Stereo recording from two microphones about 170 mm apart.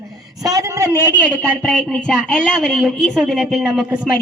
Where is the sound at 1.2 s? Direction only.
5° left (ahead or behind).